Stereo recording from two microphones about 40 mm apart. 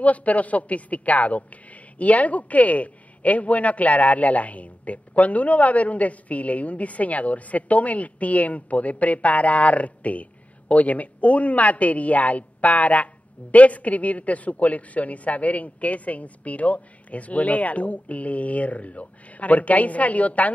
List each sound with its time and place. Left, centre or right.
0.0 s a woman's voice: left